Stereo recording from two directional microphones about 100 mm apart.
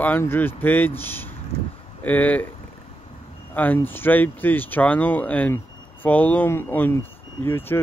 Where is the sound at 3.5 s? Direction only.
20° left (ahead or behind).